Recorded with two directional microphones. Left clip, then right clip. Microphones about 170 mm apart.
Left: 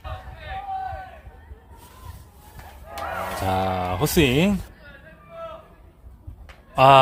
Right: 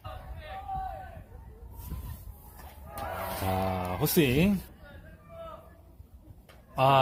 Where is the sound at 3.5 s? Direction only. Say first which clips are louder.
Left 8 dB; 20° left (ahead or behind).